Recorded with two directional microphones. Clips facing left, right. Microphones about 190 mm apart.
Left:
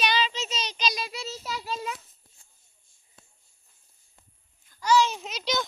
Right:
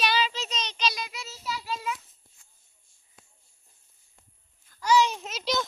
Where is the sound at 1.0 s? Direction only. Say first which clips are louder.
Left 4 dB; 35° left (ahead or behind).